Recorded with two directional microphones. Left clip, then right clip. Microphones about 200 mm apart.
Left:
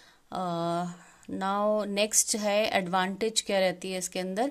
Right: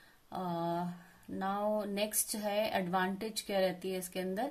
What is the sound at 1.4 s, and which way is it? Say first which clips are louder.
A woman's voice: left 7 dB; 45° left (ahead or behind).